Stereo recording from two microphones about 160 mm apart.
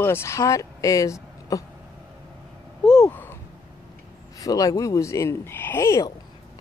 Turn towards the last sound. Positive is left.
turn(degrees=15)  # may be behind; listen again after turning